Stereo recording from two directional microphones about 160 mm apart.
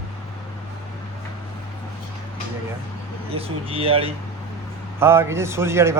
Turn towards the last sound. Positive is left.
turn(degrees=-15)  # may be behind; listen again after turning